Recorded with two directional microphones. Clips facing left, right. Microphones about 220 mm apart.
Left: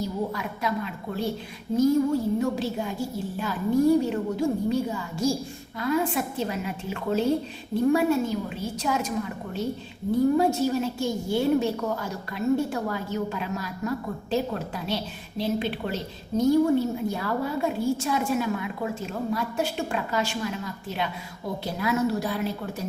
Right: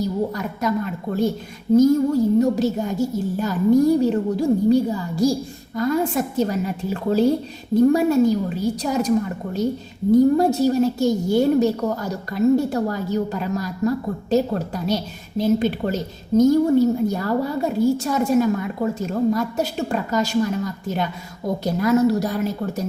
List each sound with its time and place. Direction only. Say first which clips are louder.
0.0 s a woman's voice: right 6 dB; 40° right (ahead or behind)
2.4 s a woman's voice: right 7 dB; 40° right (ahead or behind)